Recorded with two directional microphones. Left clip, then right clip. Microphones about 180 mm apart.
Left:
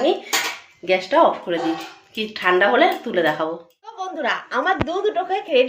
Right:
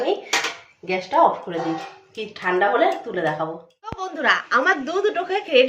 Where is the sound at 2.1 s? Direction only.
40° left (ahead or behind).